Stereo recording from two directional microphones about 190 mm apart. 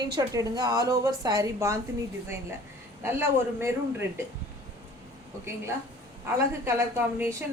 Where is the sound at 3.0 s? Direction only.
10° right (ahead or behind).